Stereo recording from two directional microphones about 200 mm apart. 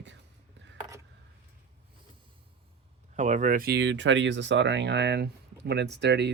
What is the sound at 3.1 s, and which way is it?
Speech, 35° right (ahead or behind).